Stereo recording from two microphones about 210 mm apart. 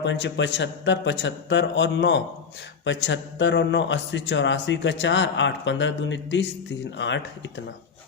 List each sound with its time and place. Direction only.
0.0 s a man's voice: 60° left (ahead or behind)